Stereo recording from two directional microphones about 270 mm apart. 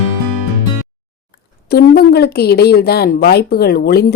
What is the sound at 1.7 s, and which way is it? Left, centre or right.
Speech, left.